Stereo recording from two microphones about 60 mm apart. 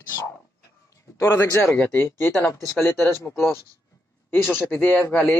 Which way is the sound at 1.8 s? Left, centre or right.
Left.